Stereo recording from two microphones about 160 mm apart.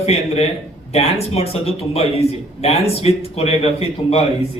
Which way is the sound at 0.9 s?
40° left (ahead or behind).